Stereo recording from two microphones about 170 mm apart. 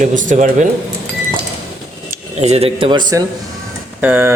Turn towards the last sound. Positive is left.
turn(degrees=-10)  # may be behind; listen again after turning